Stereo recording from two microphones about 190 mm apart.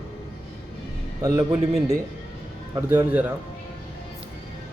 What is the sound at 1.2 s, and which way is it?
Speech, 15° right (ahead or behind).